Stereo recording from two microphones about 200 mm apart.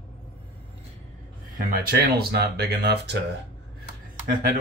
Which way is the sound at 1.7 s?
50° right (ahead or behind).